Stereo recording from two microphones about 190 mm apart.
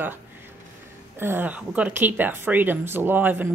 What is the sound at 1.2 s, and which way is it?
Speech, 10° right (ahead or behind).